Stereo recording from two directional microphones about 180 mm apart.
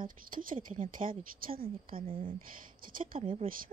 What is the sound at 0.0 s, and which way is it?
Speech, 50° right (ahead or behind).